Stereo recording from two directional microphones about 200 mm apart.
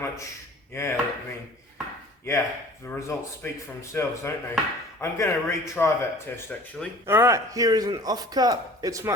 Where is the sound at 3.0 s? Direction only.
15° left (ahead or behind).